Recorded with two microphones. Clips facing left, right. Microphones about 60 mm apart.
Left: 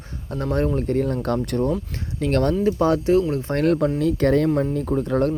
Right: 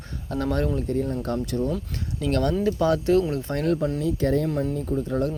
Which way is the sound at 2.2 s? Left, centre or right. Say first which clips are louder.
Left 3 dB; left.